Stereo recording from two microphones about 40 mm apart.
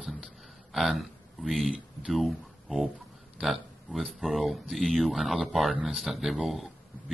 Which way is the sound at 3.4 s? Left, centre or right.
Centre.